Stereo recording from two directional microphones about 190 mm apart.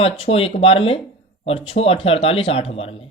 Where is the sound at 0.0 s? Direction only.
30° left (ahead or behind).